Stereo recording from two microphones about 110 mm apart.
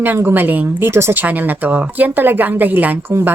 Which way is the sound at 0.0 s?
20° right (ahead or behind).